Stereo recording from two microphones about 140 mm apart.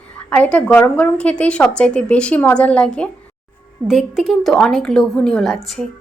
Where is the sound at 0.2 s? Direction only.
10° left (ahead or behind).